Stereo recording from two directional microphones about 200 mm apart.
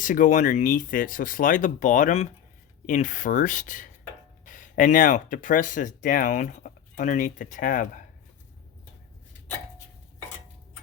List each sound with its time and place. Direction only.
0.0 s speech: 40° left (ahead or behind)